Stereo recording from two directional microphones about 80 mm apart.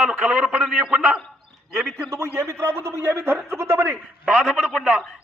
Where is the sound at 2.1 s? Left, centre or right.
Right.